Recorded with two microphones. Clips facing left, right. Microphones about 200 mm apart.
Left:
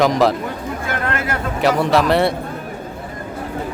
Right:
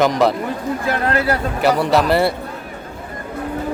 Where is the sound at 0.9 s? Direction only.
35° right (ahead or behind).